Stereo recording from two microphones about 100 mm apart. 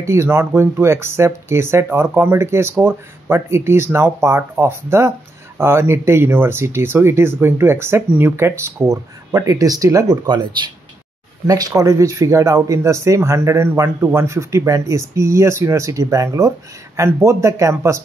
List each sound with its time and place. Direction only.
0.0 s speech: 25° right (ahead or behind)
10.2 s speech: 50° right (ahead or behind); by 18.0 s 30° right (ahead or behind)